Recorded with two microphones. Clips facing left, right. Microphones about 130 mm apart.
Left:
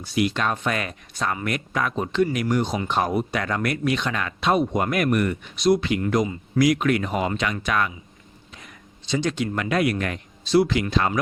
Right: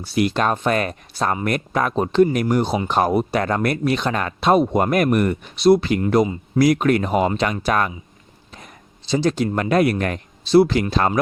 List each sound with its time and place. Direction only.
0.0 s speech: 40° right (ahead or behind)